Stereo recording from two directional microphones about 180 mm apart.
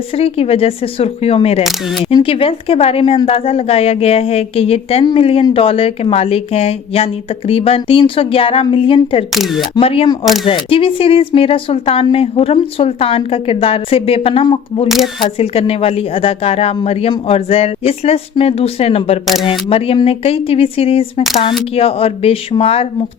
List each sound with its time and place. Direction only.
0.1 s a woman's voice: 35° left (ahead or behind)
1.6 s speech: centre (ahead or behind)
2.1 s a woman's voice: 30° left (ahead or behind)
9.3 s speech: centre (ahead or behind)
9.7 s a woman's voice: 30° left (ahead or behind)
14.8 s speech: centre (ahead or behind)
15.2 s a woman's voice: 30° left (ahead or behind)
19.2 s speech: centre (ahead or behind)
19.5 s a woman's voice: 30° left (ahead or behind)